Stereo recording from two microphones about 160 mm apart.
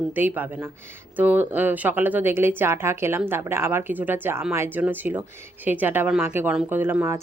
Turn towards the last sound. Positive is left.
turn(degrees=-15)  # may be behind; listen again after turning